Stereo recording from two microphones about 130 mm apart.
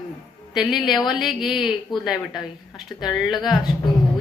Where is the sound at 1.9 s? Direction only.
35° left (ahead or behind).